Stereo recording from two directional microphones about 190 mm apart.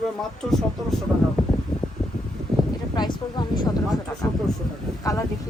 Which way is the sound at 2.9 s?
25° left (ahead or behind).